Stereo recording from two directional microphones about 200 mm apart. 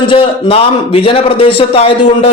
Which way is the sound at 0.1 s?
25° left (ahead or behind).